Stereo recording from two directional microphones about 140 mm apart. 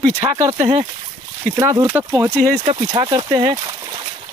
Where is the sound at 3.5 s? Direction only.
25° right (ahead or behind).